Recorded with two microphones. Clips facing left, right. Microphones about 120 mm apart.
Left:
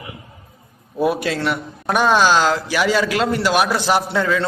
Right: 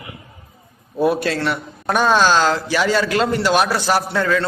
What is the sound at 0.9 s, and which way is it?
A man's voice, 10° left (ahead or behind).